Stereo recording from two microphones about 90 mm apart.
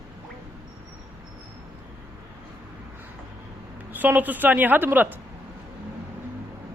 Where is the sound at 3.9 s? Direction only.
20° right (ahead or behind).